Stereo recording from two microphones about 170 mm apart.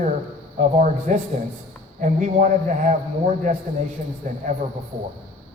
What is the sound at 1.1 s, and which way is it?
A man's voice, 45° right (ahead or behind).